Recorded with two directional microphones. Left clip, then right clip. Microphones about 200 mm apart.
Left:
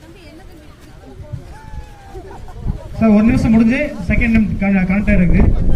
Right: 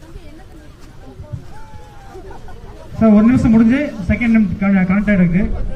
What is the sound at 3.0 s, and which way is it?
A man's voice, 50° left (ahead or behind).